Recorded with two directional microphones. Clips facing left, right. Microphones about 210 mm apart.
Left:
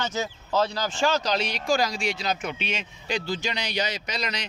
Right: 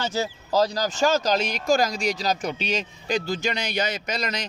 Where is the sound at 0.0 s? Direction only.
30° right (ahead or behind).